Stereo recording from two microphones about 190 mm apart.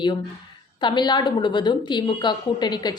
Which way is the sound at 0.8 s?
25° left (ahead or behind).